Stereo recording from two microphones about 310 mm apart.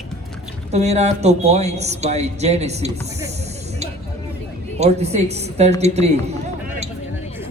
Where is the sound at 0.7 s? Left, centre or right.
Right.